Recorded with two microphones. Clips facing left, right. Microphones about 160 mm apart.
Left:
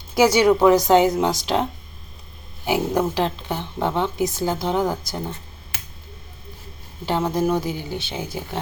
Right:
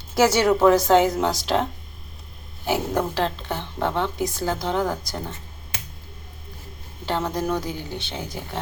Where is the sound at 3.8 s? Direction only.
5° left (ahead or behind).